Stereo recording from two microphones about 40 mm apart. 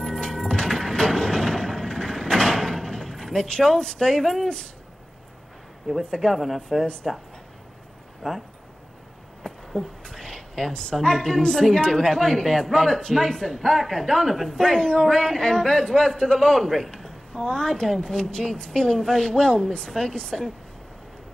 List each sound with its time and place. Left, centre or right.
0.0 s music: centre
0.9 s a sound: centre
3.4 s speech: centre
4.1 s speech: centre
5.9 s speech: centre
8.2 s speech: centre
9.5 s a sound: left
10.7 s speech: centre
17.3 s a woman's voice: centre